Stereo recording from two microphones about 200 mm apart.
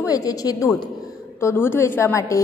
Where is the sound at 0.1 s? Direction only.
20° left (ahead or behind).